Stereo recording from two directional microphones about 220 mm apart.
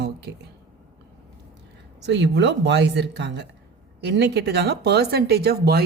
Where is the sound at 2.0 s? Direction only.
55° right (ahead or behind).